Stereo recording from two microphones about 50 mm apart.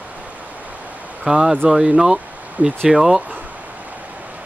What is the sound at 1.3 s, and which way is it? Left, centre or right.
Speech, centre.